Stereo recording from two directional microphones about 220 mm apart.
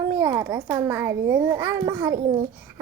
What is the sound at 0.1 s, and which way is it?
A child's voice, 15° right (ahead or behind).